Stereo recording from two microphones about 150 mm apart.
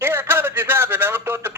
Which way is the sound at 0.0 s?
15° right (ahead or behind).